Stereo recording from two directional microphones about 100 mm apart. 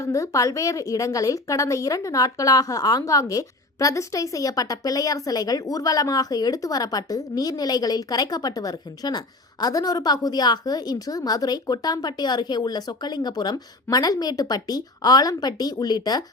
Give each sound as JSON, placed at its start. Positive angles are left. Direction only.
{"t": 0.0, "sound": "a woman's voice", "side_deg": 35}